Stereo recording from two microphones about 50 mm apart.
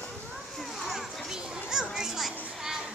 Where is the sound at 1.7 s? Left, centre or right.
Centre.